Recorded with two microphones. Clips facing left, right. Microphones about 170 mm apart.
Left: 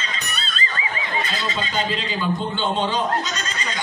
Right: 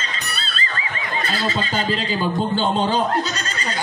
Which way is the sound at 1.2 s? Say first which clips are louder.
Right 3 dB; 40° right (ahead or behind).